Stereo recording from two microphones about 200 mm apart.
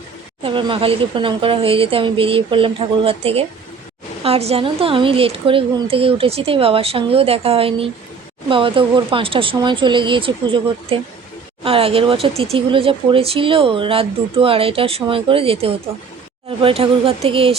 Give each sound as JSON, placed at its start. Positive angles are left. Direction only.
{"t": 0.4, "sound": "speech", "side_deg": -25}